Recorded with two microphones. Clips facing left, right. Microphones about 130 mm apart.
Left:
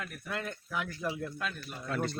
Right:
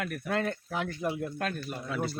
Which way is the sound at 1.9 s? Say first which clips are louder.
Even; 5° right (ahead or behind).